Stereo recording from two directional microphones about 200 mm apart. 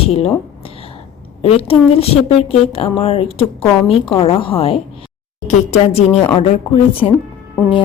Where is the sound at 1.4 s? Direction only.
30° left (ahead or behind).